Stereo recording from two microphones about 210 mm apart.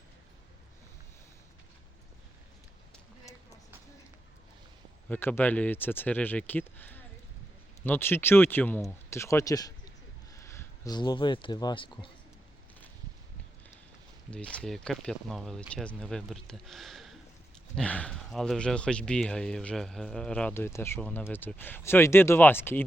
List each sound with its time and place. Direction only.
3.3 s a sound: 15° left (ahead or behind)
5.0 s speech: 10° left (ahead or behind)
14.3 s speech: 5° left (ahead or behind)